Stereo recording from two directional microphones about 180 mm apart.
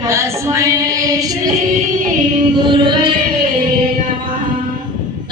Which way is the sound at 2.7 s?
25° right (ahead or behind).